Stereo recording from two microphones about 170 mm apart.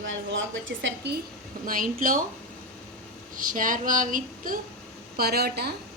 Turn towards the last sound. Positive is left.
turn(degrees=-70)  # may be behind; listen again after turning